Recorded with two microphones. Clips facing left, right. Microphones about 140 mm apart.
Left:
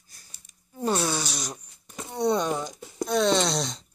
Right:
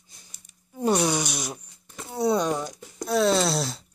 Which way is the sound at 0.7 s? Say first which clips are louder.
Right 3 dB; 15° right (ahead or behind).